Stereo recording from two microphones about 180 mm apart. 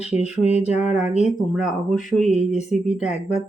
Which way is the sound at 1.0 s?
40° left (ahead or behind).